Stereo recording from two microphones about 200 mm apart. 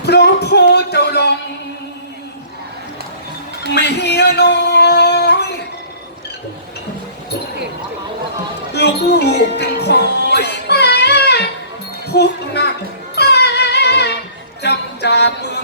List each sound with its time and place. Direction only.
0.0 s a sound: 55° left (ahead or behind)
3.8 s singing: 55° left (ahead or behind)
8.7 s music: 55° left (ahead or behind)